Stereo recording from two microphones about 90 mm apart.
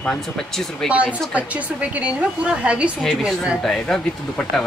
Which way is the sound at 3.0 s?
5° right (ahead or behind).